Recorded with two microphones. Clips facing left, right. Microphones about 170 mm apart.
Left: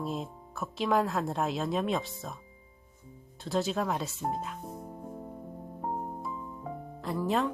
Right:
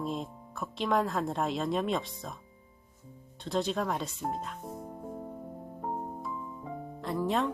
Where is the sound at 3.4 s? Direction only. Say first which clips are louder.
Left 1 dB; 5° left (ahead or behind).